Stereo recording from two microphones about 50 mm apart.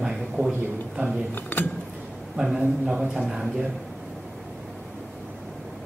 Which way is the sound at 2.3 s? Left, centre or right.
Centre.